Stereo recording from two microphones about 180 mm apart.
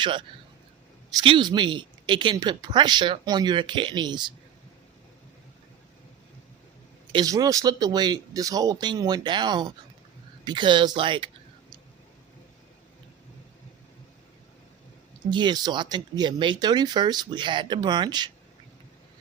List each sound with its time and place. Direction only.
0.0 s a woman's voice: 25° right (ahead or behind)
7.1 s a woman's voice: 20° right (ahead or behind)
15.3 s a woman's voice: 25° right (ahead or behind)